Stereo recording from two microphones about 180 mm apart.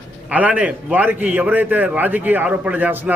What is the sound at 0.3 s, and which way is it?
A man's voice, 10° right (ahead or behind).